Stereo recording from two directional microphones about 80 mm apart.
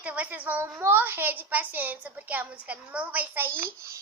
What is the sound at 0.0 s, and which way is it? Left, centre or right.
A child's voice, centre.